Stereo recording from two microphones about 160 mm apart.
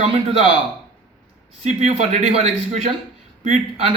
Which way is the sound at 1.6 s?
45° right (ahead or behind).